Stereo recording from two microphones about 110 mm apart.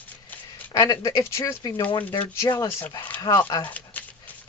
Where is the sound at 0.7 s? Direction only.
30° left (ahead or behind).